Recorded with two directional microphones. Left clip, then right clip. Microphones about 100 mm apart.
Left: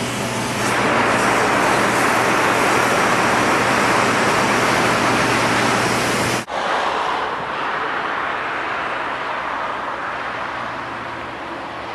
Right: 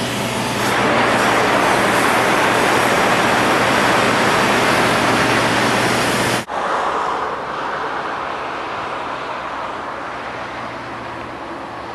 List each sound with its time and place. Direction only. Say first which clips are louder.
0.0 s vehicle: right 2 dB; 20° right (ahead or behind)
6.6 s waves: left 1 dB; 20° left (ahead or behind)